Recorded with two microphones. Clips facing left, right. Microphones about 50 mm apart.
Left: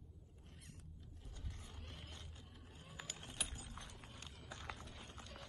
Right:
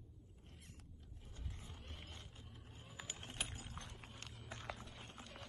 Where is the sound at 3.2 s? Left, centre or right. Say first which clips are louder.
Right 3 dB; right.